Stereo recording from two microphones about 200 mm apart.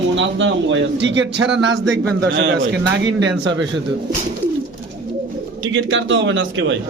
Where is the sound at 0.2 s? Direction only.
65° right (ahead or behind).